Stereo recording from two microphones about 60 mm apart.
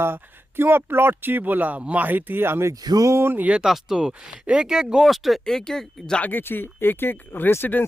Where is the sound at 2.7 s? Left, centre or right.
Right.